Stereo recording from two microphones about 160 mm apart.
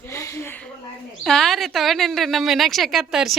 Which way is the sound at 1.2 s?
Centre (ahead or behind).